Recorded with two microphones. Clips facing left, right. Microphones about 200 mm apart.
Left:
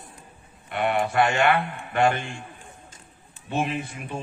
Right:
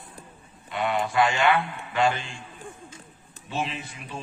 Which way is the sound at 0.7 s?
60° left (ahead or behind).